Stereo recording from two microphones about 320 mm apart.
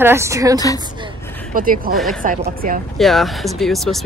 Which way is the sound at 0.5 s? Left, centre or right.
Centre.